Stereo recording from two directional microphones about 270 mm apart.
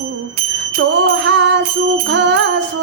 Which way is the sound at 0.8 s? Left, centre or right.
Right.